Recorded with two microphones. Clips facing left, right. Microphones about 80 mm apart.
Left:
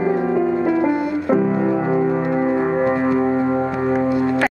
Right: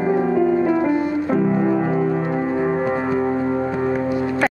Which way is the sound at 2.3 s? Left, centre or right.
Centre.